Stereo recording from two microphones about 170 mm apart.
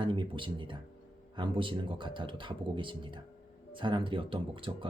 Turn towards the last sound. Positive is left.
turn(degrees=-30)  # may be behind; listen again after turning